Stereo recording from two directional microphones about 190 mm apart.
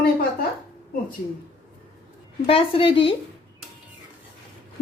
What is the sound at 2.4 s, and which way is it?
Speech, 30° left (ahead or behind).